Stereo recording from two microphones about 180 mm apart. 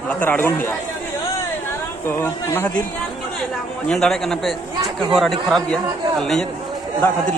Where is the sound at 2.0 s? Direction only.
15° left (ahead or behind).